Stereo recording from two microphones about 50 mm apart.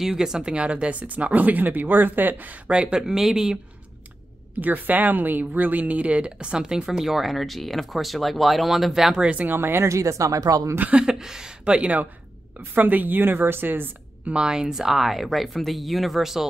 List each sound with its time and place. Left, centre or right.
0.0 s speech: centre; by 2.6 s right
2.7 s speech: centre
4.6 s speech: right; by 9.2 s centre
9.2 s speech: right
9.5 s a woman's voice: right
9.8 s speech: right
11.0 s speech: centre
12.5 s a woman's voice: right
14.2 s speech: centre